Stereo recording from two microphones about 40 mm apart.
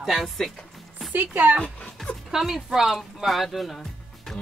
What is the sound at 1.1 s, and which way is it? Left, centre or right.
Speech, right.